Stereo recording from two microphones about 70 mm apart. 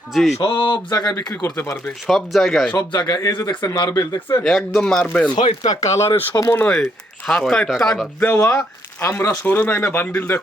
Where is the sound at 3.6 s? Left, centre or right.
Left.